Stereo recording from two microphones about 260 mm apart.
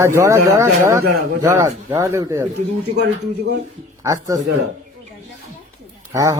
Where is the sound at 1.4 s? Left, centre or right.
Centre.